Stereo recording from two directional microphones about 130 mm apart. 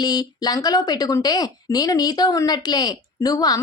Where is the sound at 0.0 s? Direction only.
30° left (ahead or behind).